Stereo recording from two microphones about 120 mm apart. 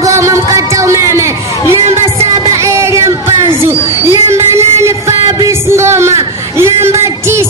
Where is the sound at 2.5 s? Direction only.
25° right (ahead or behind).